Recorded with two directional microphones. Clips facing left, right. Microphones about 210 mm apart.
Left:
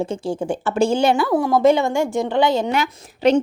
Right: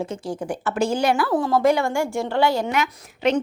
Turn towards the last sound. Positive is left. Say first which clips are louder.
# left 5 dB
turn(degrees=30)  # may be behind; listen again after turning